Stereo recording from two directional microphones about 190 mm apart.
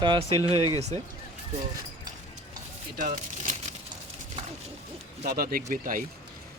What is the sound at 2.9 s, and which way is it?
Speech, 45° right (ahead or behind).